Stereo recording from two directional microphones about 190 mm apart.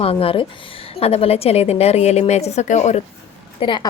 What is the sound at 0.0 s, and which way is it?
A woman's voice, 30° left (ahead or behind).